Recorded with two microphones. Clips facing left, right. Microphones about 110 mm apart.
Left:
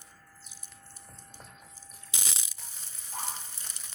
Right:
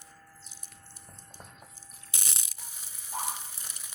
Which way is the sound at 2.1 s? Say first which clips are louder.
Left 3 dB; 90° left.